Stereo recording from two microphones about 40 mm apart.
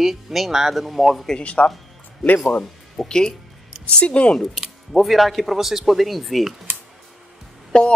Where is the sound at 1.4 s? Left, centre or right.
Left.